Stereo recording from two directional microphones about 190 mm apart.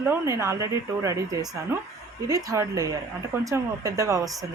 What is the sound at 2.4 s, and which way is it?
Speech, 20° right (ahead or behind).